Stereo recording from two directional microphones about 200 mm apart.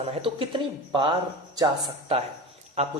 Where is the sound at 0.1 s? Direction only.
30° right (ahead or behind).